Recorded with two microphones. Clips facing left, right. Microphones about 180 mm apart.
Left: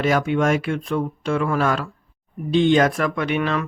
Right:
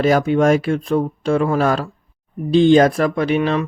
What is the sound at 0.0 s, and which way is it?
Speech, 35° right (ahead or behind).